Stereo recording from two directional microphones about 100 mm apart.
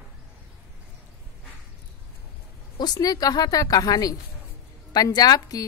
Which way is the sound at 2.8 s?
40° left (ahead or behind).